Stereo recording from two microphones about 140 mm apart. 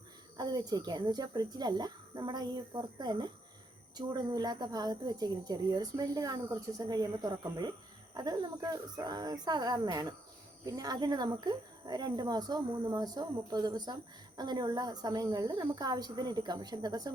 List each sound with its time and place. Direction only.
0.3 s speech: 30° right (ahead or behind)